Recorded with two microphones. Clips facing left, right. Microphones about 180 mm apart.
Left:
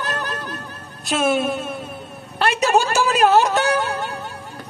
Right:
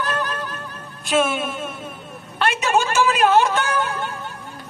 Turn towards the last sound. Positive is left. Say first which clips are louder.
# left 2 dB
turn(degrees=40)  # may be behind; listen again after turning